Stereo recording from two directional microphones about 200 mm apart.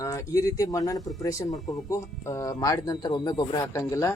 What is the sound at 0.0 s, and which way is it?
Speech, 15° left (ahead or behind).